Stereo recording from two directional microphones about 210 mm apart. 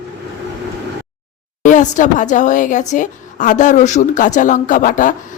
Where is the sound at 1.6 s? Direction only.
35° left (ahead or behind).